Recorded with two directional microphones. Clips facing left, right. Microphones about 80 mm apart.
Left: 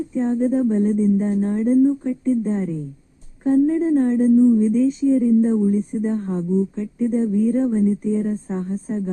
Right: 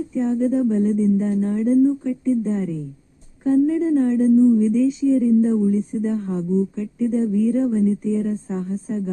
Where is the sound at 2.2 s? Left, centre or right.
Left.